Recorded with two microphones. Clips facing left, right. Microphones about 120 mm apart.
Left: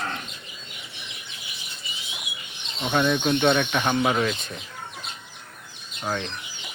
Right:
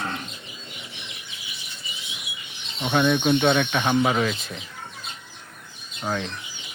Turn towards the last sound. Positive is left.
turn(degrees=0)  # may be behind; listen again after turning